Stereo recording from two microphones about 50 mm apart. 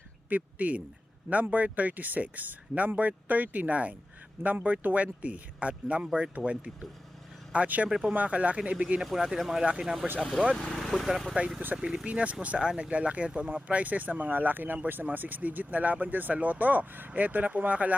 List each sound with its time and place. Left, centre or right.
0.3 s speech: right
7.9 s speech: centre
8.1 s speech: right
9.0 s speech: centre
10.8 s speech: centre
12.0 s speech: right